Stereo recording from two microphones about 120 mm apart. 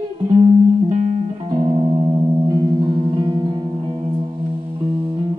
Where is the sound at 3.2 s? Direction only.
40° right (ahead or behind).